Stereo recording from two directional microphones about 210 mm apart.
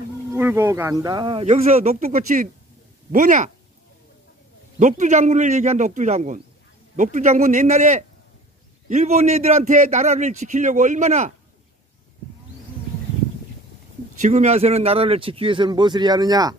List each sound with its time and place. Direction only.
0.3 s a man's voice: 10° right (ahead or behind); by 3.5 s 35° right (ahead or behind)
4.7 s a man's voice: 35° right (ahead or behind)
14.2 s a man's voice: 35° right (ahead or behind); by 16.5 s 20° right (ahead or behind)